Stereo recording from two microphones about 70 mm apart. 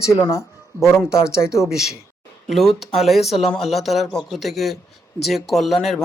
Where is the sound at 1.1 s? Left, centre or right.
Left.